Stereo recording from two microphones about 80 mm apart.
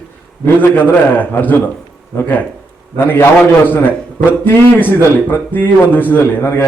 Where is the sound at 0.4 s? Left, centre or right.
Left.